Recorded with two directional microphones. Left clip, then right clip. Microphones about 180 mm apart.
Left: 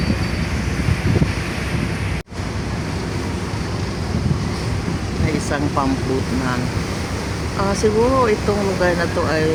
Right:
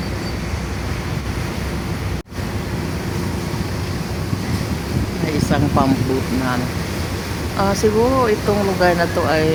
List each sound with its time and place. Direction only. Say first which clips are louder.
5.5 s speech: right 3 dB; 10° right (ahead or behind)
7.6 s speech: right 1 dB; 10° right (ahead or behind)